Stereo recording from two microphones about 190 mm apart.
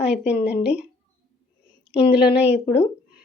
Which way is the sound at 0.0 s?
5° right (ahead or behind).